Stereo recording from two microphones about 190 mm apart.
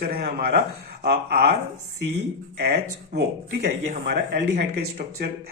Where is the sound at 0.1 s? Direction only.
50° right (ahead or behind).